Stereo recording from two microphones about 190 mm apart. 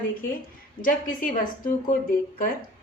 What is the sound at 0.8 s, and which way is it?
A woman's voice, 45° left (ahead or behind).